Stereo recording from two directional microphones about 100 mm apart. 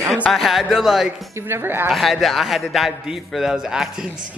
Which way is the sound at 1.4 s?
25° right (ahead or behind).